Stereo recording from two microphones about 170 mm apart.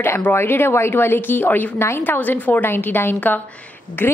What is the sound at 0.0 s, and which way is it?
A woman's voice, 15° left (ahead or behind).